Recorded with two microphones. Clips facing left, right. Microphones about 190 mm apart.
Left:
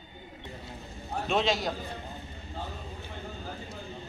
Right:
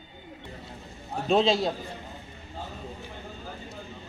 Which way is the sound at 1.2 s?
30° right (ahead or behind).